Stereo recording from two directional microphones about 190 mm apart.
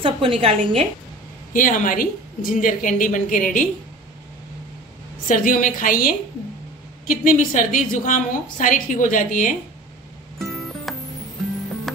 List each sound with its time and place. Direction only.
0.0 s a woman's voice: 30° right (ahead or behind)
1.5 s a woman's voice: 45° left (ahead or behind)
5.3 s a woman's voice: 45° left (ahead or behind)
10.4 s music: centre (ahead or behind)